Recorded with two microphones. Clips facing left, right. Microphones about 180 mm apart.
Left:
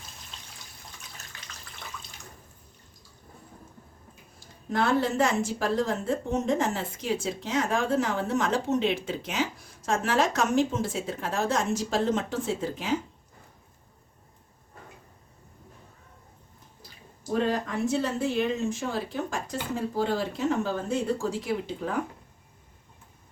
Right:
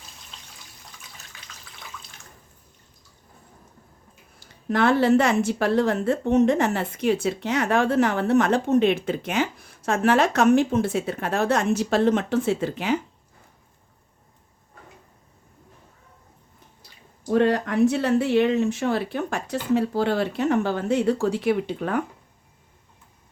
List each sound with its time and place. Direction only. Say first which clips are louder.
4.4 s speech: right 5 dB; 75° right (ahead or behind)
17.3 s speech: right 7 dB; 75° right (ahead or behind)